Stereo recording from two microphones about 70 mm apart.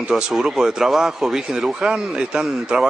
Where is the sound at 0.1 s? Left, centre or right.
Centre.